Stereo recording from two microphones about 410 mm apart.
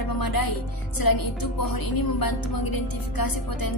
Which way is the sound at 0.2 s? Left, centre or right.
Left.